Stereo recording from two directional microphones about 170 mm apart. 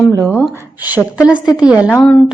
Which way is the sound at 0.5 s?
10° right (ahead or behind).